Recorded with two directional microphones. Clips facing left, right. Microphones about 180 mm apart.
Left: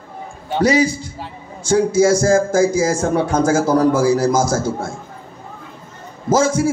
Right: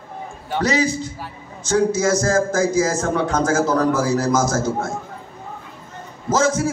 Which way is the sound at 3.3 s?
30° left (ahead or behind).